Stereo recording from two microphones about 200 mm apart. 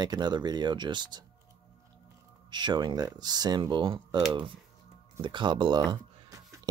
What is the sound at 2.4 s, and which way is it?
Speech, 20° right (ahead or behind).